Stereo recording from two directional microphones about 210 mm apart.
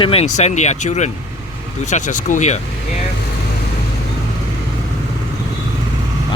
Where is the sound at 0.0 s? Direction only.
30° left (ahead or behind).